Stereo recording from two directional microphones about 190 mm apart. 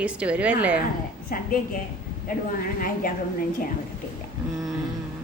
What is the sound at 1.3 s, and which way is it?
Speech, 50° left (ahead or behind).